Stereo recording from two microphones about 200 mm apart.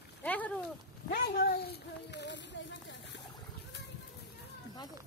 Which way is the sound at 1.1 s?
50° left (ahead or behind).